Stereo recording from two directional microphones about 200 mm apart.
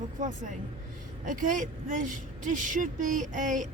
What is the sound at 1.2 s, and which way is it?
Speech, 40° right (ahead or behind).